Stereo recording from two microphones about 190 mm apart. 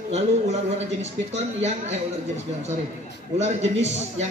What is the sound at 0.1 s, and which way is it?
A man's voice, 35° right (ahead or behind).